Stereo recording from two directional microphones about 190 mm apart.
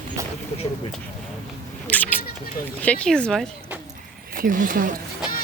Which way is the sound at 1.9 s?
10° left (ahead or behind).